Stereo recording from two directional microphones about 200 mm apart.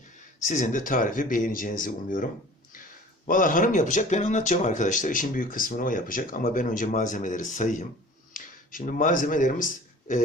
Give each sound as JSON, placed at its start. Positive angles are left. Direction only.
{"t": 0.3, "sound": "speech", "side_deg": 40}
{"t": 3.2, "sound": "speech", "side_deg": 40}